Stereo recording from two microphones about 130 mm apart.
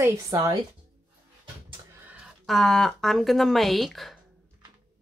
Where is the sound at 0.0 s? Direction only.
20° right (ahead or behind).